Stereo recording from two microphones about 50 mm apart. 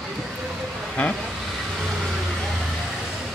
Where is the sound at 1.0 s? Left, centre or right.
Left.